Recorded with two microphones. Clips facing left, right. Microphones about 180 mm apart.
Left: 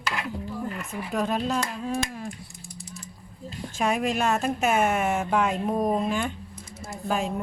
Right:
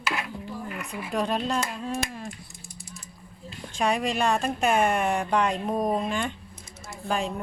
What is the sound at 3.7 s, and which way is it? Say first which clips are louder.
Speech: even; 5° left (ahead or behind).